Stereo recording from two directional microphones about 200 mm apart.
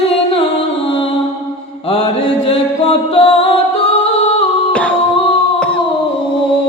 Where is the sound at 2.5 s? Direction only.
30° left (ahead or behind).